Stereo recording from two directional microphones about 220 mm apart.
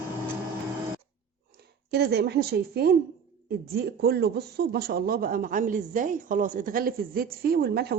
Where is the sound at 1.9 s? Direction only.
50° right (ahead or behind).